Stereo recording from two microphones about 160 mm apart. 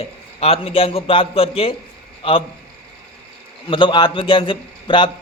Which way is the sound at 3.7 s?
30° left (ahead or behind).